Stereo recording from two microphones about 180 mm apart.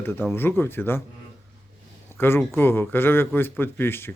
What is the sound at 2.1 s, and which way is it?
Speech, 10° left (ahead or behind).